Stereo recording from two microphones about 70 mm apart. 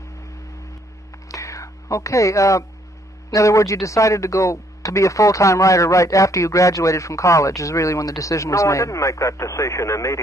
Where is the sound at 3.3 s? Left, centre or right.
Left.